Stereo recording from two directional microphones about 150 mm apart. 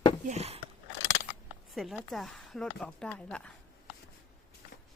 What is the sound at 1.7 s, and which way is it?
Speech, centre (ahead or behind).